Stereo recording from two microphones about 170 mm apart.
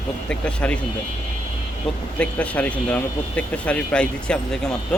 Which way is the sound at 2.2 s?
10° left (ahead or behind).